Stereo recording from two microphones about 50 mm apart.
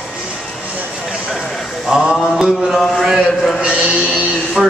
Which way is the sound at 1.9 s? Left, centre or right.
Centre.